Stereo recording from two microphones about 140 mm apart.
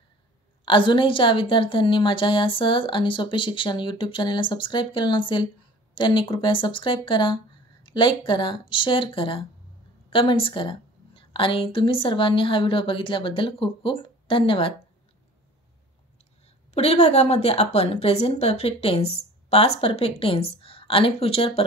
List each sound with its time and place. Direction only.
0.7 s a woman's voice: 35° left (ahead or behind)
16.7 s a woman's voice: 45° left (ahead or behind)